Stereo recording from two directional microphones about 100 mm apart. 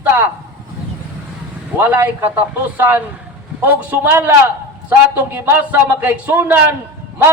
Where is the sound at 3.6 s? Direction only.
20° right (ahead or behind).